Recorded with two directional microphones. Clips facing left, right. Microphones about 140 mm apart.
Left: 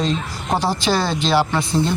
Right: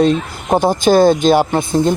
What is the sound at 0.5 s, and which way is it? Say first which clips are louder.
Speech: right 9 dB; 50° right (ahead or behind).